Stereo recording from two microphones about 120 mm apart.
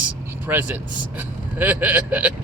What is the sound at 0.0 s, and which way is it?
Speech, 15° right (ahead or behind).